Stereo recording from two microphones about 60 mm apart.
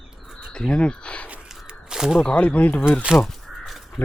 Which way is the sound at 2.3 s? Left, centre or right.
Left.